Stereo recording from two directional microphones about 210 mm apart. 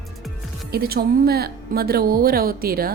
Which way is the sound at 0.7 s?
45° right (ahead or behind).